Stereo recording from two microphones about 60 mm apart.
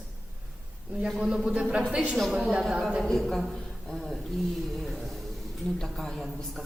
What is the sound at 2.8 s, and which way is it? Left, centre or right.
Speech, centre.